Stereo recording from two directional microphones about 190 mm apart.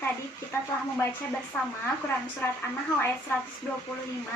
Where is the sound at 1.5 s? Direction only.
5° left (ahead or behind).